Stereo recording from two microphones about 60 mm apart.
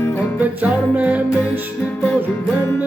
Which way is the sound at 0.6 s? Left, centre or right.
Right.